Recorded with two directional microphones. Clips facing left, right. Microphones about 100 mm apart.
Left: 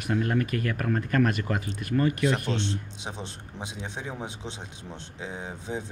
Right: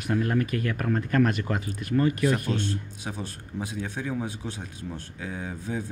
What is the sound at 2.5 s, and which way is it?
Speech, 25° left (ahead or behind).